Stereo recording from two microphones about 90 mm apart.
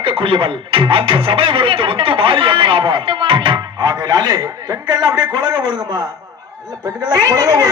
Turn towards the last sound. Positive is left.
turn(degrees=-45)  # may be behind; listen again after turning